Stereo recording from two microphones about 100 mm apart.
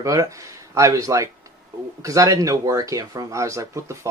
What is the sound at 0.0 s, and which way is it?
Speech, 35° right (ahead or behind).